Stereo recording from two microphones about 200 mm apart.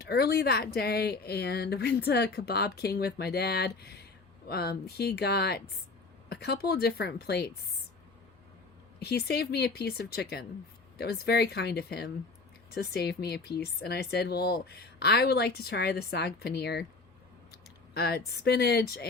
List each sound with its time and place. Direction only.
0.0 s speech: 50° left (ahead or behind)
9.0 s speech: 55° left (ahead or behind)